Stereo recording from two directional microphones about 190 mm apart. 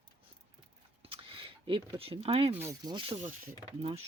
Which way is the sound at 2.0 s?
30° right (ahead or behind).